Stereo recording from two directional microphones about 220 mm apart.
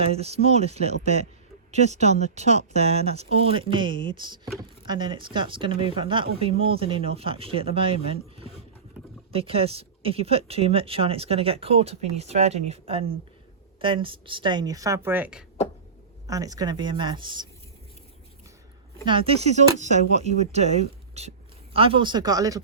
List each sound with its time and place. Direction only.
0.0 s speech: 30° right (ahead or behind)
19.0 s speech: 25° right (ahead or behind)